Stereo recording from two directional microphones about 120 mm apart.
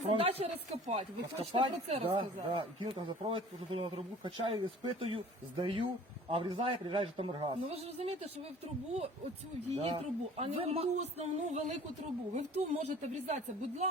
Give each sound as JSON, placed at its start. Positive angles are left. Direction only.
{"t": 0.0, "sound": "speech", "side_deg": -50}
{"t": 7.8, "sound": "a man's voice", "side_deg": -60}